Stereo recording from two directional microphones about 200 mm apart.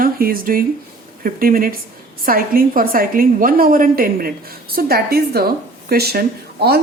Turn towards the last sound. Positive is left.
turn(degrees=-55)  # may be behind; listen again after turning